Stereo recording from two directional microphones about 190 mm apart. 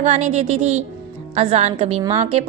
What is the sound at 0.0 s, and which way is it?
A woman's voice, 35° right (ahead or behind).